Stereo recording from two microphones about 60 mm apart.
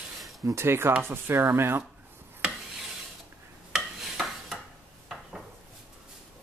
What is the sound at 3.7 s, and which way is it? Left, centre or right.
Dishes, centre.